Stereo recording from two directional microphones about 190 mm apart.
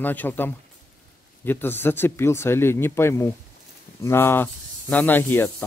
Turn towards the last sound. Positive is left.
turn(degrees=10)  # may be behind; listen again after turning